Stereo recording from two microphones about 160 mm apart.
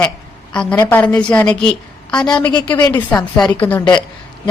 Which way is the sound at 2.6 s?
25° left (ahead or behind).